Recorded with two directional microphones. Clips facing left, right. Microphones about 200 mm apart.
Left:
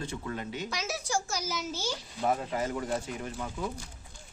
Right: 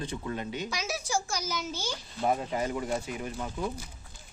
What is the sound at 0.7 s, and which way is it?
A child's voice, centre (ahead or behind).